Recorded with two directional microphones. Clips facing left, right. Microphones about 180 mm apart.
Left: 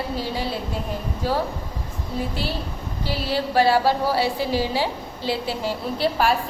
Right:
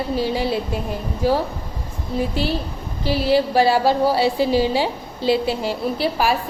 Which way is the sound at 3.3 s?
15° right (ahead or behind).